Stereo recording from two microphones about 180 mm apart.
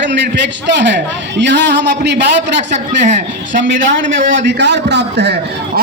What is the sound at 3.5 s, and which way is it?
A man's voice, 90° right.